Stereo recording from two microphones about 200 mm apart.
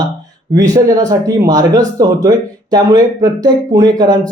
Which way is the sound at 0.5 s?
15° right (ahead or behind).